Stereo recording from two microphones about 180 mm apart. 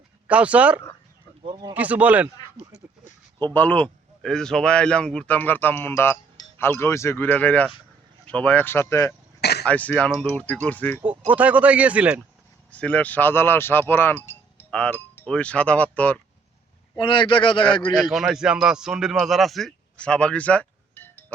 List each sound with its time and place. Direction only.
0.3 s speech: 5° right (ahead or behind)
1.5 s speech: 25° right (ahead or behind)
1.7 s speech: 10° right (ahead or behind)
3.3 s speech: 10° left (ahead or behind)
9.4 s throat clearing: 65° left (ahead or behind)
9.6 s speech: 10° left (ahead or behind)
11.0 s speech: 10° right (ahead or behind)
12.7 s speech: 10° left (ahead or behind)
17.0 s speech: 25° left (ahead or behind)
17.9 s a man's voice: centre (ahead or behind)